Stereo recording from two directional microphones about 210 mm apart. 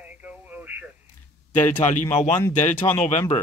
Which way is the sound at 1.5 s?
35° left (ahead or behind).